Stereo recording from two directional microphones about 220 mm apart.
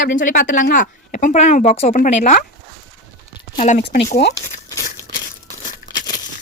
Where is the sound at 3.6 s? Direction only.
30° left (ahead or behind).